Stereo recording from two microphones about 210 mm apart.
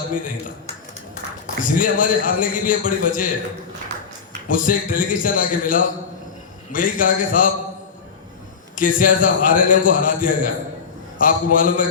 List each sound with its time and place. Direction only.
0.1 s a man's voice: 40° left (ahead or behind)
4.4 s a man's voice: 40° left (ahead or behind)
8.7 s a man's voice: 40° left (ahead or behind)